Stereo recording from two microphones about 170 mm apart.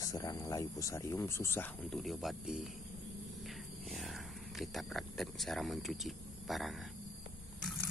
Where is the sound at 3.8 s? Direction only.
Centre (ahead or behind).